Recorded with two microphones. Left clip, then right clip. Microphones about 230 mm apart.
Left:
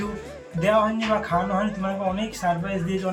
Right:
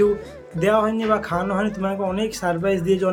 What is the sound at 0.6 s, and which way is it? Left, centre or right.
Speech, centre.